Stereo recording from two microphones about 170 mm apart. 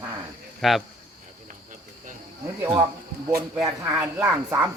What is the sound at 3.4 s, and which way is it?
Speech, 20° right (ahead or behind).